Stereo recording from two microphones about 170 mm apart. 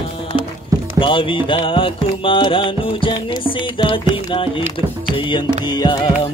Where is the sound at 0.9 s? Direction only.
30° left (ahead or behind).